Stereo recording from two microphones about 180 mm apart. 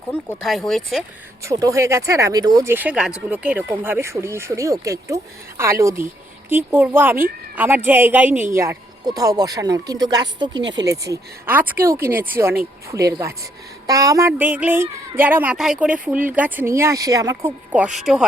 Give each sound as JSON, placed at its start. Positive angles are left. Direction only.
{"t": 0.1, "sound": "speech", "side_deg": 5}
{"t": 1.5, "sound": "a woman's voice", "side_deg": -20}
{"t": 10.6, "sound": "speech", "side_deg": -80}
{"t": 11.1, "sound": "a woman's voice", "side_deg": -10}
{"t": 17.7, "sound": "speech", "side_deg": -5}